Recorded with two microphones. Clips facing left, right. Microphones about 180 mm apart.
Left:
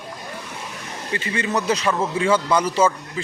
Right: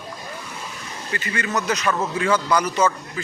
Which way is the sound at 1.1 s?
25° left (ahead or behind).